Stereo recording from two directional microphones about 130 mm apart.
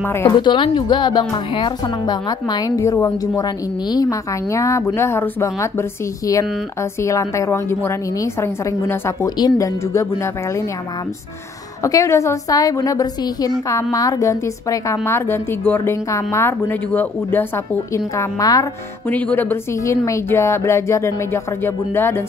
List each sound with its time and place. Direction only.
0.0 s speech: 15° left (ahead or behind)
0.4 s a woman's voice: 40° left (ahead or behind); by 10.7 s 25° left (ahead or behind)
11.8 s a woman's voice: 25° left (ahead or behind)
19.0 s a woman's voice: 15° left (ahead or behind)